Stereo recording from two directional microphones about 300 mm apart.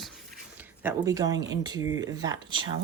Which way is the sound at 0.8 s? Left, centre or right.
Centre.